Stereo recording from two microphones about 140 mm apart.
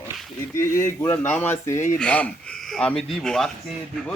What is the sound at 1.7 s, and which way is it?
Speech, 60° left (ahead or behind).